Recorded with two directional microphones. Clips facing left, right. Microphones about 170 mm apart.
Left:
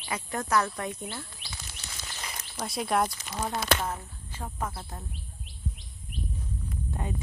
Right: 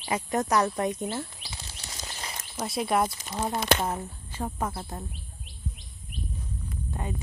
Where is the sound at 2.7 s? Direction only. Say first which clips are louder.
Right 2 dB; centre (ahead or behind).